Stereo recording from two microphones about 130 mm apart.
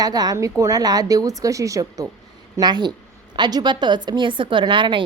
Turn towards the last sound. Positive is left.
turn(degrees=-40)  # may be behind; listen again after turning